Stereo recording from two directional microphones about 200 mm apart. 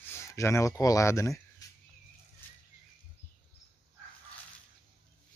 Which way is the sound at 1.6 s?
15° left (ahead or behind).